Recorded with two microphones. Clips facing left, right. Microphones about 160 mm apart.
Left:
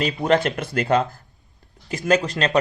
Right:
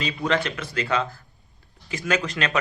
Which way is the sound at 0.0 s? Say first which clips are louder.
Left 5 dB; 50° left (ahead or behind).